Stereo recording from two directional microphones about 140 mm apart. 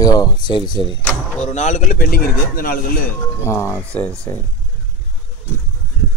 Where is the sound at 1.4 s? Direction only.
55° left (ahead or behind); by 3.1 s 90° left.